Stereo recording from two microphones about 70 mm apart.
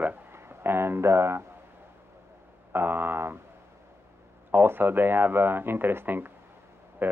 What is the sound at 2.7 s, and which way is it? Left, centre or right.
Speech, right.